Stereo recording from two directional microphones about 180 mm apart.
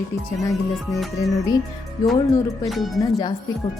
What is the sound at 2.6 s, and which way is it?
Speech, centre (ahead or behind).